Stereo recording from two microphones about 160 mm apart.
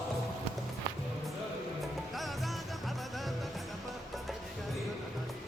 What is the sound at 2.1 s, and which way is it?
Music, centre (ahead or behind).